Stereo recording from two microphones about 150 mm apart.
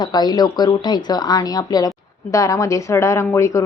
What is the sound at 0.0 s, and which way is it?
A woman's voice, 30° left (ahead or behind).